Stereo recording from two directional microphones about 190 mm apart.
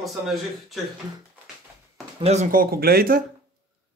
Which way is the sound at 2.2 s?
35° right (ahead or behind).